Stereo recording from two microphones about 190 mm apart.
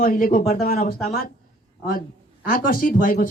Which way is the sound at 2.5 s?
45° left (ahead or behind).